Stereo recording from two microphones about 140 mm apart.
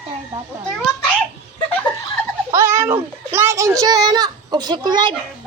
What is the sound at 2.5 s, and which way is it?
A child's voice, 20° right (ahead or behind).